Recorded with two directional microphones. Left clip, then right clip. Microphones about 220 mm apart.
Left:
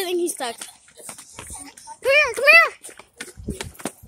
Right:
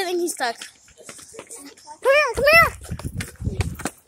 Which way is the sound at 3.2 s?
35° right (ahead or behind).